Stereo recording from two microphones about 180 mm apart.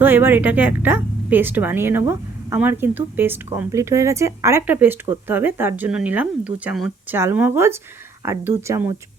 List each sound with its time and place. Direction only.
0.0 s a woman's voice: 10° right (ahead or behind)